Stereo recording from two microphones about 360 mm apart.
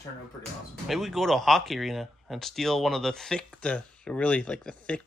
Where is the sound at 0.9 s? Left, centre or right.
Centre.